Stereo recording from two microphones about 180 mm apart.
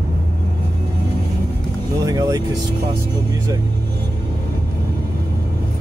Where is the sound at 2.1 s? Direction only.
20° right (ahead or behind).